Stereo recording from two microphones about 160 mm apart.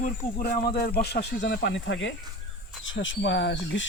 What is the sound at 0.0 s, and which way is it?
Speech, 60° left (ahead or behind).